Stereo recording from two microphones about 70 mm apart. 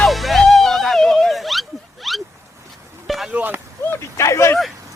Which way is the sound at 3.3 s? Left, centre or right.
Right.